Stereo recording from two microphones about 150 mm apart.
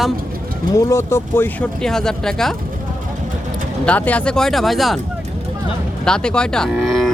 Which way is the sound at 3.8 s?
10° left (ahead or behind).